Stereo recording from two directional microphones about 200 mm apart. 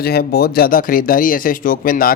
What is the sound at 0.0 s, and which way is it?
A man's voice, 50° left (ahead or behind).